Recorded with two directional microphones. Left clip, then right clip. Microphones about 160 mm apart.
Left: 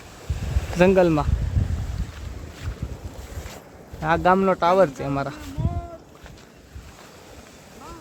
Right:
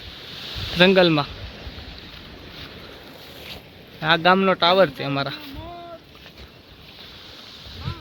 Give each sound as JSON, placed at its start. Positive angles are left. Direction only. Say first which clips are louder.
{"t": 0.2, "sound": "a sound", "louder": "right 5 dB", "side_deg": 70}
{"t": 0.8, "sound": "speech", "louder": "right 2 dB", "side_deg": 0}
{"t": 4.0, "sound": "speech", "louder": "right 2 dB", "side_deg": 0}